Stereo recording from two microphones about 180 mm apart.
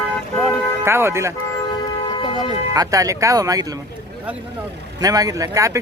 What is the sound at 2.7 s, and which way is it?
Speech, 20° right (ahead or behind).